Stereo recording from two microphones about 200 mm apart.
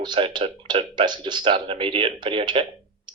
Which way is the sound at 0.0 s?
25° right (ahead or behind).